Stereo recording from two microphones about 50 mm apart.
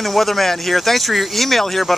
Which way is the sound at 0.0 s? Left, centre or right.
Centre.